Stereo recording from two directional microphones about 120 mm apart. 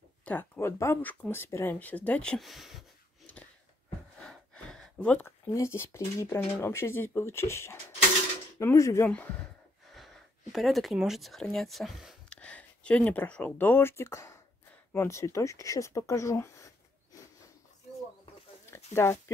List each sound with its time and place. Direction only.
0.2 s speech: 15° left (ahead or behind); by 2.8 s centre (ahead or behind)
4.2 s gasp: 5° left (ahead or behind)
5.2 s speech: 25° left (ahead or behind)
9.1 s speech: 10° left (ahead or behind)
9.9 s speech: centre (ahead or behind)
12.3 s speech: 10° left (ahead or behind); by 17.3 s 25° left (ahead or behind)
18.7 s a sound: 25° left (ahead or behind)